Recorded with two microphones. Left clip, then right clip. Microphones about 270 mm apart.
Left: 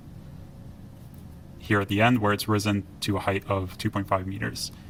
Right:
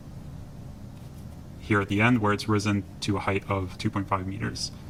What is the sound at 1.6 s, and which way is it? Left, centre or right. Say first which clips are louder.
Speech: left 1 dB; left.